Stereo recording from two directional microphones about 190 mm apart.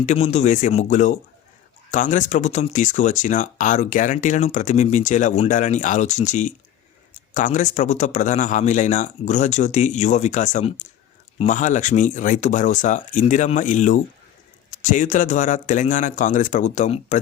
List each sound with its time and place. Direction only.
0.0 s speech: 35° left (ahead or behind)